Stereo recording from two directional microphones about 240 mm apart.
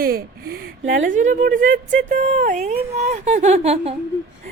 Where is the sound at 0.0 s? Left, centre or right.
Right.